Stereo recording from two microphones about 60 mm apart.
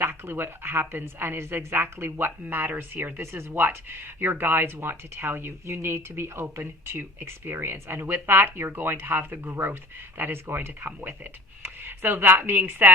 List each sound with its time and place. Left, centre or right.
0.0 s speech: right